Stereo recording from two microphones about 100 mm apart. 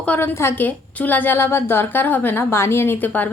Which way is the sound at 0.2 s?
25° left (ahead or behind).